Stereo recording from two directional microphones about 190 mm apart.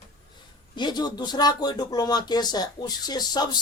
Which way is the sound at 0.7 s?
25° left (ahead or behind).